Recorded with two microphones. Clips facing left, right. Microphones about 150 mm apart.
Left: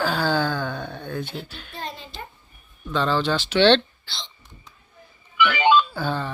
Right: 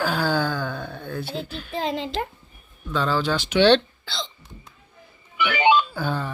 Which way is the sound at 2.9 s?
10° right (ahead or behind).